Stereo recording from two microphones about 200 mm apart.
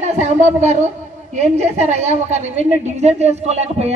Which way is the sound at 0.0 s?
35° right (ahead or behind).